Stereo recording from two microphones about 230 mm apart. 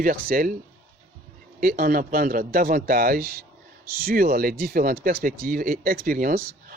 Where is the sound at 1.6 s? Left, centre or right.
Right.